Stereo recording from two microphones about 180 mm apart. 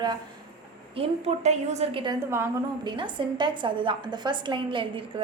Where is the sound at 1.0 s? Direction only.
40° right (ahead or behind).